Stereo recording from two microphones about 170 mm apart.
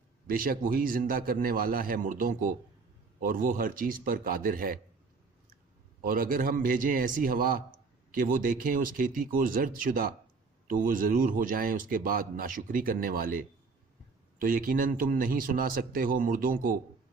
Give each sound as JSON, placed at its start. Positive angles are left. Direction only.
{"t": 0.3, "sound": "speech", "side_deg": -55}
{"t": 6.0, "sound": "speech", "side_deg": -55}